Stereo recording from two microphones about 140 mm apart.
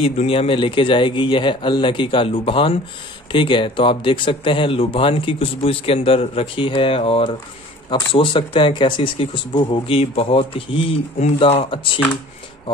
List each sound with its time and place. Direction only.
0.0 s speech: 45° left (ahead or behind)